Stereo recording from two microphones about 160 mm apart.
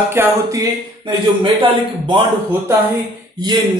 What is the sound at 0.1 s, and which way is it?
Speech, 20° right (ahead or behind).